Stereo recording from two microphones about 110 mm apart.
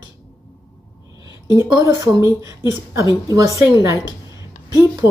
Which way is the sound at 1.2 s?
45° left (ahead or behind).